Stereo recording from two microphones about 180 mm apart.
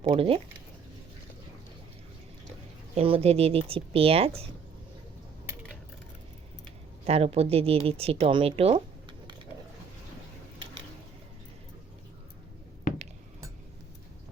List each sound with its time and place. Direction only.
0.1 s speech: 30° right (ahead or behind)
2.9 s speech: 35° right (ahead or behind)
7.0 s a woman's voice: 35° right (ahead or behind)